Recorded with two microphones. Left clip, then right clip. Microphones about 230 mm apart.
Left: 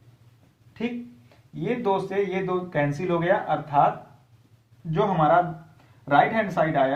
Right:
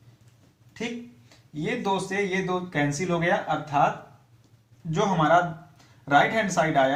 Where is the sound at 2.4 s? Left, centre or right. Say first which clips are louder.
Left 1 dB; left.